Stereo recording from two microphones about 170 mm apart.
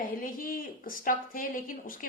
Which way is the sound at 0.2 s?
55° left (ahead or behind).